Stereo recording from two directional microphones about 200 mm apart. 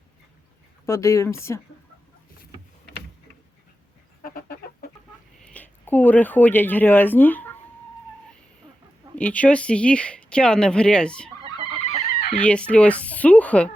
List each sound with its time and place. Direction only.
0.9 s speech: 15° left (ahead or behind)
4.2 s chicken: 45° left (ahead or behind)
5.4 s speech: 5° left (ahead or behind)
9.1 s speech: 5° left (ahead or behind)